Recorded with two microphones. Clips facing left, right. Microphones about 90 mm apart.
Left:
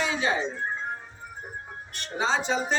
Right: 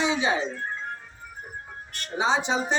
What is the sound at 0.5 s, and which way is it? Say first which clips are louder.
Music: left 2 dB; 15° left (ahead or behind).